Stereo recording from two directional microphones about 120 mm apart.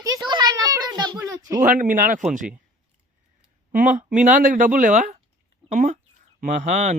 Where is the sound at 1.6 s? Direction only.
90° right.